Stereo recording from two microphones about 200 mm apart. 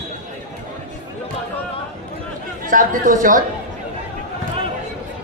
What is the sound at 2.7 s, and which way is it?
Speech, 40° right (ahead or behind).